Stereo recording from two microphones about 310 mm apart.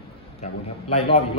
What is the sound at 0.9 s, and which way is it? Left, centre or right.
Speech, centre.